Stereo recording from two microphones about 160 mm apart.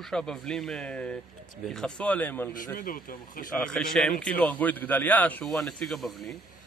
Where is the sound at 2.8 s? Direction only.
60° left (ahead or behind).